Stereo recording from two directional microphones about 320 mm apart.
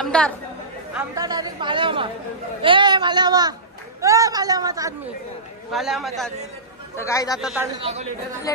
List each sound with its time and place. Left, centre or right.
0.0 s a man's voice: centre
0.9 s a woman's voice: centre
5.7 s a man's voice: centre
7.3 s a man's voice: centre
7.7 s speech: centre